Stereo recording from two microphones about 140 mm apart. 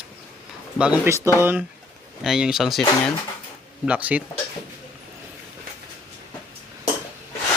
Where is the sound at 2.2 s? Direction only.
5° right (ahead or behind).